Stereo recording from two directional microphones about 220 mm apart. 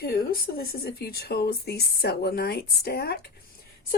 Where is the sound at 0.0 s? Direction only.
45° left (ahead or behind).